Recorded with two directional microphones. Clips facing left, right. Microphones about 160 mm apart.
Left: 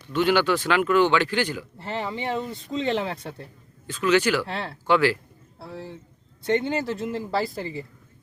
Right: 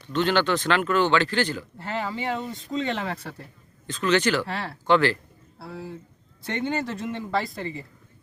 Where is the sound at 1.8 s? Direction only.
30° left (ahead or behind).